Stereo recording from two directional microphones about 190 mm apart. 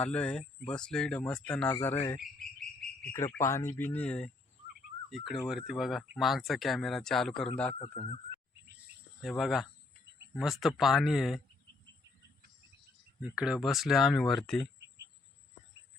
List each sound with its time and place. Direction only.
0.0 s speech: 5° left (ahead or behind)
2.4 s bird: 5° left (ahead or behind)
3.1 s speech: 15° left (ahead or behind)
7.8 s speech: 30° left (ahead or behind)
9.2 s speech: centre (ahead or behind)
13.1 s speech: 5° right (ahead or behind)